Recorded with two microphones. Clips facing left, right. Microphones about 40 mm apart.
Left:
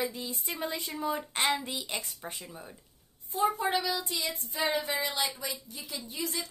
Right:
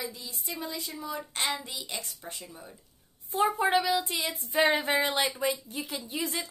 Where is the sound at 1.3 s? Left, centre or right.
Centre.